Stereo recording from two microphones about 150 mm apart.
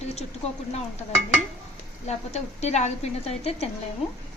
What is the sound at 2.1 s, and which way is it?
A woman's voice, 50° left (ahead or behind).